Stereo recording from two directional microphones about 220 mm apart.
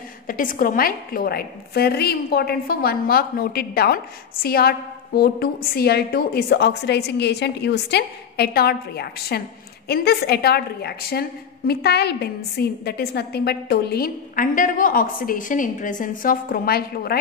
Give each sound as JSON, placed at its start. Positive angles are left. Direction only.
{"t": 0.3, "sound": "a woman's voice", "side_deg": 40}